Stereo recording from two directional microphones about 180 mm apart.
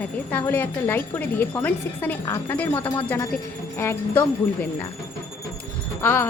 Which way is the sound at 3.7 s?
10° left (ahead or behind).